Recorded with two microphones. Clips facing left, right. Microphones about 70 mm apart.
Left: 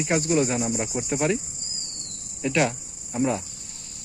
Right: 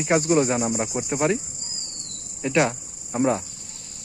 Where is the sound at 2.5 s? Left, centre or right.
Right.